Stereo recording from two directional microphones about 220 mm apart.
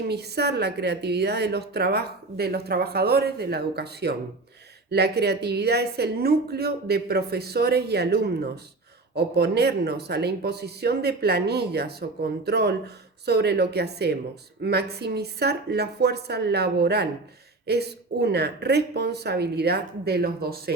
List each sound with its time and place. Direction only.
0.1 s a woman's voice: 50° right (ahead or behind)